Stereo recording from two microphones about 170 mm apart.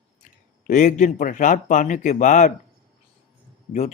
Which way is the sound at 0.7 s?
50° left (ahead or behind).